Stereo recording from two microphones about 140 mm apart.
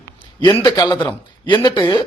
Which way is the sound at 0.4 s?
30° left (ahead or behind).